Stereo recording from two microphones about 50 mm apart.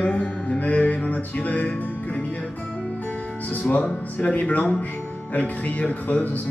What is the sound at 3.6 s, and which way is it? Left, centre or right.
Speech, left.